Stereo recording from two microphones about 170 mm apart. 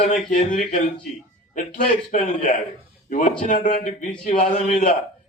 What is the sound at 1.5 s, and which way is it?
A man's voice, 50° left (ahead or behind).